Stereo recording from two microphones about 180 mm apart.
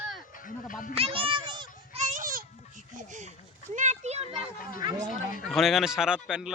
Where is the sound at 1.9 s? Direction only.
40° right (ahead or behind).